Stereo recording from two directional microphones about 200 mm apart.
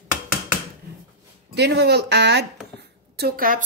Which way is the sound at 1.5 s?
55° right (ahead or behind).